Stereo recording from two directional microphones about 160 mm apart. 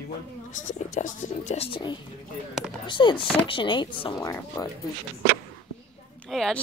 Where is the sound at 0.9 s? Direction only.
50° left (ahead or behind); by 4.2 s 30° left (ahead or behind).